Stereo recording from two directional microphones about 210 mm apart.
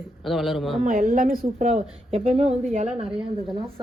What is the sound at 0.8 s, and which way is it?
A woman's voice, 40° right (ahead or behind).